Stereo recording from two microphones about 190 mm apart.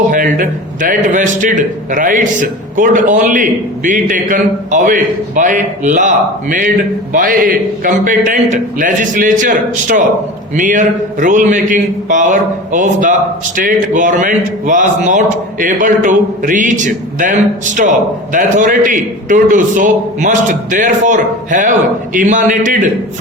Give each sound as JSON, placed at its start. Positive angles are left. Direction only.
{"t": 0.1, "sound": "a man's voice", "side_deg": -45}